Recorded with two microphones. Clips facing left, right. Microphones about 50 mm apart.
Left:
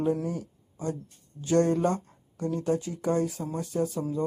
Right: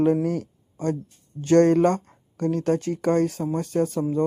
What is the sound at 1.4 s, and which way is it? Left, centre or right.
Speech, right.